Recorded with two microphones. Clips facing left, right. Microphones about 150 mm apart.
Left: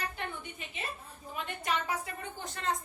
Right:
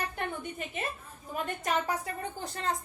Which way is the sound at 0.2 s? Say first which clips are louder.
Right 4 dB; 50° right (ahead or behind).